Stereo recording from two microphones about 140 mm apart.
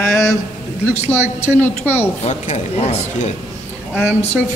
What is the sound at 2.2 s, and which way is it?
Speech, 55° left (ahead or behind).